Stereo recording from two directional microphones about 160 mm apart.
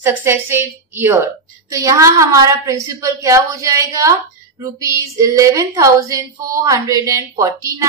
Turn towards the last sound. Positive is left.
turn(degrees=-20)  # may be behind; listen again after turning